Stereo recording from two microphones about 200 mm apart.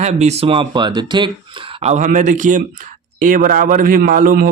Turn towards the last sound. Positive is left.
turn(degrees=-45)  # may be behind; listen again after turning